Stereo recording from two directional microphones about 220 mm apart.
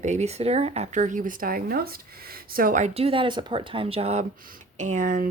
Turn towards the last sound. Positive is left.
turn(degrees=-35)  # may be behind; listen again after turning